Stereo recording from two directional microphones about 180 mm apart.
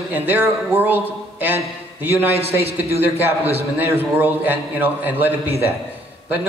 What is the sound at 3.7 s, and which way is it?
A man's voice, 10° right (ahead or behind).